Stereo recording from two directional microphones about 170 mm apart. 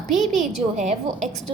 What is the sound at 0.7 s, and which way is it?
Speech, 40° right (ahead or behind).